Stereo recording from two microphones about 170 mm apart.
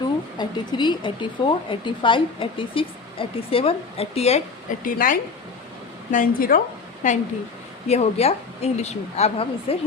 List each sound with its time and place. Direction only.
0.3 s speech: 25° left (ahead or behind)